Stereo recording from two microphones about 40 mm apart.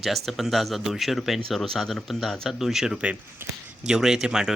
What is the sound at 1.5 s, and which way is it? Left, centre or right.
Speech, centre.